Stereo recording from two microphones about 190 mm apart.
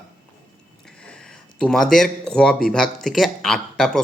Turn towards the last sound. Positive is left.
turn(degrees=0)  # may be behind; listen again after turning